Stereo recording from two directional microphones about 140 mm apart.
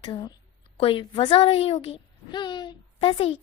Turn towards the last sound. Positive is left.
turn(degrees=40)  # may be behind; listen again after turning